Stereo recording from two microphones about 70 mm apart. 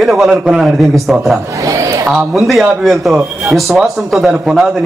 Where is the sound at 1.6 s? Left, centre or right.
Right.